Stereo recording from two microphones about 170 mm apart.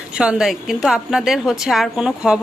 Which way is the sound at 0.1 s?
5° right (ahead or behind).